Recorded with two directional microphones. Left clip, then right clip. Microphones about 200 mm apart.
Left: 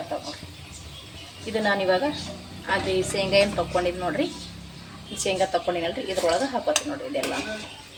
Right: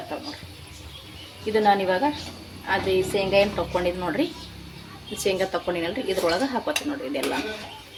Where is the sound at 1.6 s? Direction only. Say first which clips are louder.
Right 1 dB; 15° right (ahead or behind).